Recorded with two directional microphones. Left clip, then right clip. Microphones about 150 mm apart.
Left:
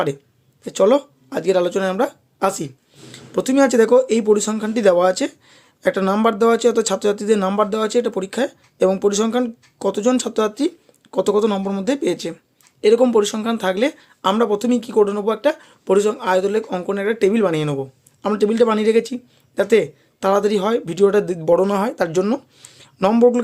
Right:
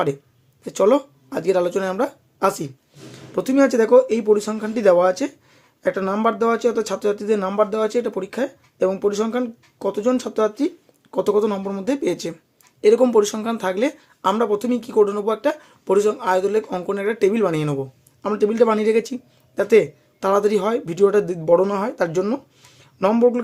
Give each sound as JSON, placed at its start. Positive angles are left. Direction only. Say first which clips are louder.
{"t": 0.6, "sound": "speech", "louder": "left 2 dB", "side_deg": 10}